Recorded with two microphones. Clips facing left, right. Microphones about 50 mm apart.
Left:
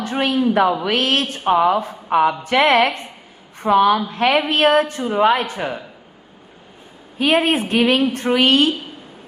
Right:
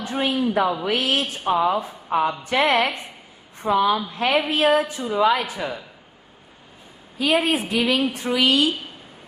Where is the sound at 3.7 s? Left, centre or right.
Left.